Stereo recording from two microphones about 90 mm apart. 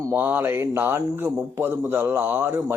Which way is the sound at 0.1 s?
20° right (ahead or behind).